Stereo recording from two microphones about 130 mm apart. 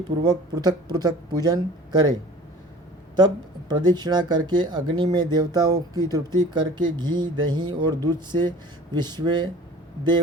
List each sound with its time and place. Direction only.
0.3 s speech: 30° right (ahead or behind)
3.7 s speech: 35° right (ahead or behind)
5.1 s a sound: 30° right (ahead or behind)
6.5 s speech: 35° right (ahead or behind)